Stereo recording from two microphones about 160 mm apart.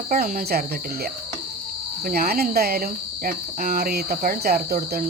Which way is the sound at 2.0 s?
65° right (ahead or behind).